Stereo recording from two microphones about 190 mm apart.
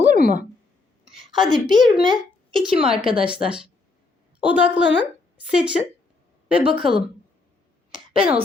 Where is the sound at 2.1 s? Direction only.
Centre (ahead or behind).